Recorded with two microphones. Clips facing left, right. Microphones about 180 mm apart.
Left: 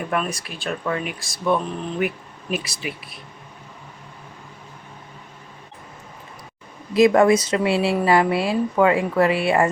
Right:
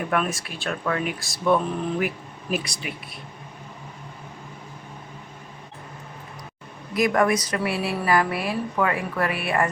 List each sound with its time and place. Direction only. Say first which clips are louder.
0.1 s speech: even; centre (ahead or behind)
6.9 s speech: left 6 dB; 25° left (ahead or behind)